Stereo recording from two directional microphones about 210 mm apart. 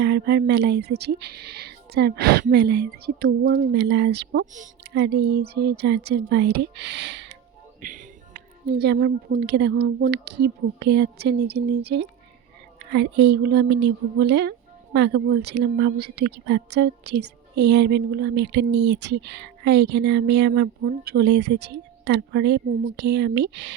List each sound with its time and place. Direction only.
0.0 s speech: 55° right (ahead or behind)
7.8 s music: 40° right (ahead or behind)
8.8 s speech: 55° right (ahead or behind)